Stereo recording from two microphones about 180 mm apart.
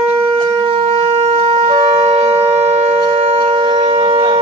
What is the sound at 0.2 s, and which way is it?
Shofar, 30° right (ahead or behind).